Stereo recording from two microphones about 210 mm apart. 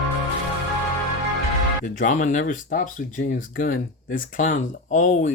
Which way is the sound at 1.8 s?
40° left (ahead or behind).